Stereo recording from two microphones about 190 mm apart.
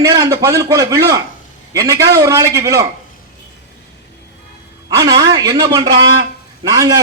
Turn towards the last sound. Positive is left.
turn(degrees=-20)  # may be behind; listen again after turning